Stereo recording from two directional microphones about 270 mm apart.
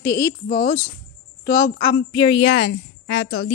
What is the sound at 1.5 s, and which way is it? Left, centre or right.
Speech, centre.